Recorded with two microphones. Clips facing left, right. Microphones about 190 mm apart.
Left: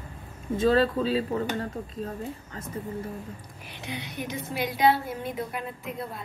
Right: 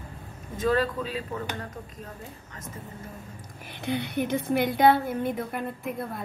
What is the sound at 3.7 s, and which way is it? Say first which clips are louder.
A woman's voice: right 7 dB; 55° right (ahead or behind).